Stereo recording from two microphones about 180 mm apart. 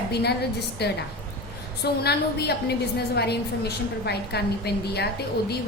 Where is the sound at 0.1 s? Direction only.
65° left (ahead or behind).